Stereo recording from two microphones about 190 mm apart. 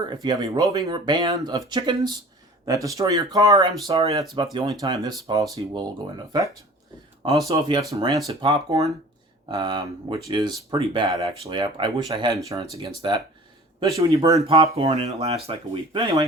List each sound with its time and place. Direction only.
0.0 s speech: 20° right (ahead or behind)
14.4 s speech: 30° right (ahead or behind)